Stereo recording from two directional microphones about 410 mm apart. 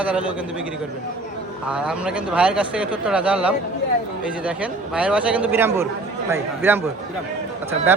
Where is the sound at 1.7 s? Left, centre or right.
Centre.